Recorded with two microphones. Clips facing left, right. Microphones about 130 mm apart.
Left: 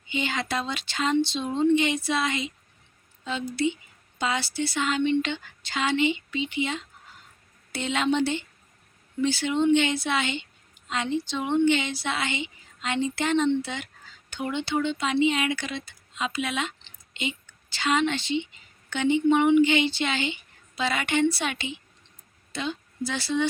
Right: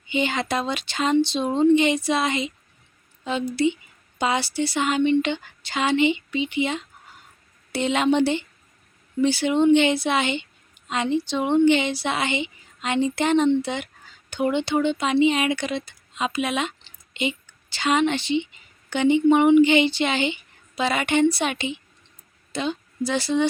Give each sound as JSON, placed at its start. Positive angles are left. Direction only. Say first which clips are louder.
{"t": 0.1, "sound": "a woman's voice", "louder": "right 5 dB", "side_deg": -20}